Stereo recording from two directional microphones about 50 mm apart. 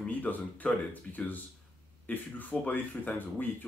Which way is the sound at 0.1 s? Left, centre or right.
Left.